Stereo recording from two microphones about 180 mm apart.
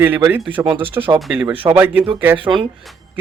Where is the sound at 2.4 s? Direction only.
25° right (ahead or behind).